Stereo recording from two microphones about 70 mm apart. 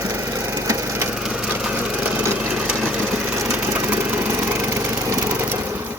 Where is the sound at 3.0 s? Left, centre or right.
Right.